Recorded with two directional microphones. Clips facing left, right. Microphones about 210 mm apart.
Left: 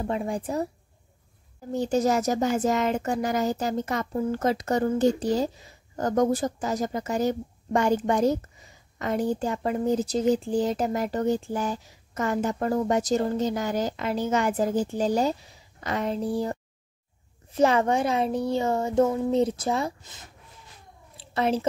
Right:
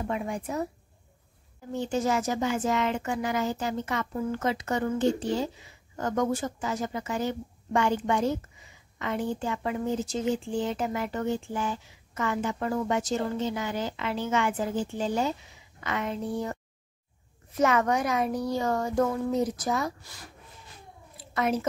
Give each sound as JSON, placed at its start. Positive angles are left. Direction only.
{"t": 0.0, "sound": "speech", "side_deg": 30}
{"t": 1.7, "sound": "a child's voice", "side_deg": 40}
{"t": 21.2, "sound": "a sound", "side_deg": 30}